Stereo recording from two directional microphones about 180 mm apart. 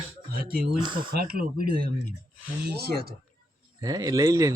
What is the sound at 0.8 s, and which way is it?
Speech, 25° right (ahead or behind).